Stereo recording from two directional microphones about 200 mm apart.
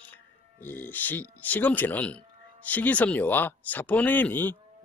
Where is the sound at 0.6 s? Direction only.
10° left (ahead or behind).